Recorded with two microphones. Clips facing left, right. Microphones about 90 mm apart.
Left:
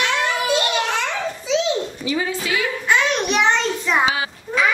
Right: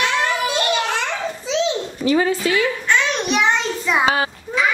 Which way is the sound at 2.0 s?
45° right (ahead or behind).